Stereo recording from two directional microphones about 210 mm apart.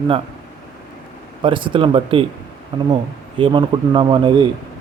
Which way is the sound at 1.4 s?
25° right (ahead or behind).